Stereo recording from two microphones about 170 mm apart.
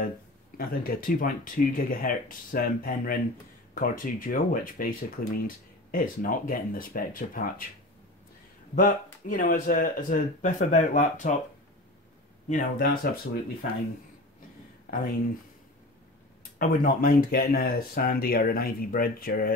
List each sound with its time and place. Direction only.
0.6 s speech: 60° left (ahead or behind)
8.7 s speech: 50° left (ahead or behind)
12.4 s speech: 50° left (ahead or behind)
14.9 s speech: 55° left (ahead or behind)
16.5 s speech: 55° left (ahead or behind)